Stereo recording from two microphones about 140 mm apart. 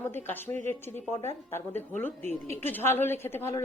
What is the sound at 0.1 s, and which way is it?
Speech, 15° left (ahead or behind).